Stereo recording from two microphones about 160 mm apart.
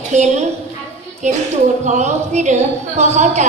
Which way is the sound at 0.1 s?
50° right (ahead or behind).